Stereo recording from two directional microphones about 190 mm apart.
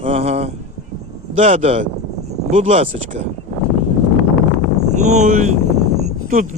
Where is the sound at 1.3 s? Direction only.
35° right (ahead or behind).